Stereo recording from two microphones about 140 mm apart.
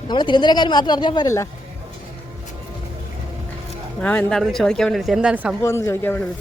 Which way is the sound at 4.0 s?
10° left (ahead or behind).